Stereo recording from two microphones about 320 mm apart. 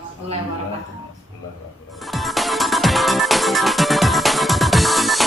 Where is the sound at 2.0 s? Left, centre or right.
Centre.